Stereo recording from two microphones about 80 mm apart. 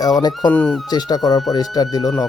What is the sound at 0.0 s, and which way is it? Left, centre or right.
Speech, left.